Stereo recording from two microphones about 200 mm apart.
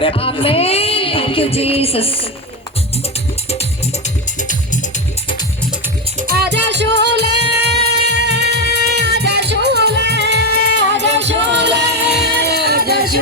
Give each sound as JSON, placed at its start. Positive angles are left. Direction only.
{"t": 0.0, "sound": "music", "side_deg": 25}
{"t": 6.2, "sound": "music", "side_deg": -50}